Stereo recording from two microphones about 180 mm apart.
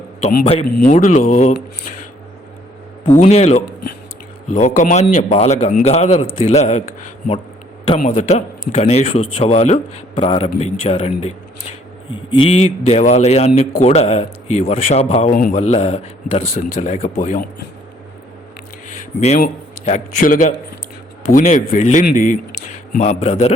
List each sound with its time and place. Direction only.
0.2 s a man's voice: 35° left (ahead or behind)
3.2 s a man's voice: 35° left (ahead or behind)
8.0 s a man's voice: 40° left (ahead or behind)
19.8 s a man's voice: 40° left (ahead or behind)